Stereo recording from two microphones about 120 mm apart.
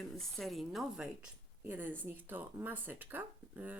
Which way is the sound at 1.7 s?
15° right (ahead or behind).